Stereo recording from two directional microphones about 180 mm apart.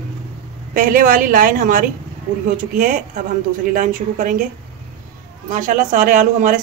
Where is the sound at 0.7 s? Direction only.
50° right (ahead or behind).